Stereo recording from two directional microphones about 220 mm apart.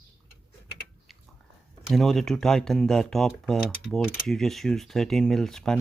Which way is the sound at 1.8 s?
Centre (ahead or behind).